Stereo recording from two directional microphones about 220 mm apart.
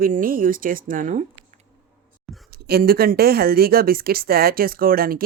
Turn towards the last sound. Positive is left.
turn(degrees=-40)  # may be behind; listen again after turning